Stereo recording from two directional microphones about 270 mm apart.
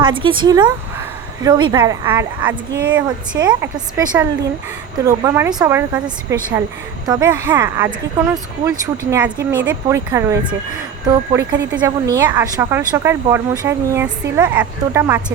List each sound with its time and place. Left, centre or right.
0.0 s speech: centre